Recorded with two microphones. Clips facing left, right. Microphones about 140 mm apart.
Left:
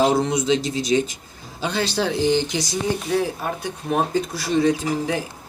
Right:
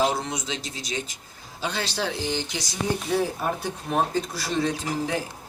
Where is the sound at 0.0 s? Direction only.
25° left (ahead or behind).